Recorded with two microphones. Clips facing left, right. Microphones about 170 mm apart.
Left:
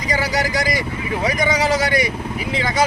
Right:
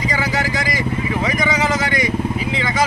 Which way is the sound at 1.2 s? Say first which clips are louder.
Left 3 dB; 35° left (ahead or behind).